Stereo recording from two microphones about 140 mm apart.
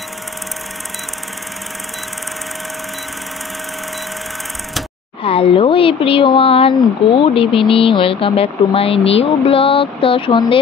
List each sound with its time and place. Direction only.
5.2 s speech: 40° left (ahead or behind)